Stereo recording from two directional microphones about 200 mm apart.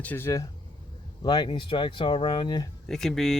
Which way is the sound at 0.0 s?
10° left (ahead or behind).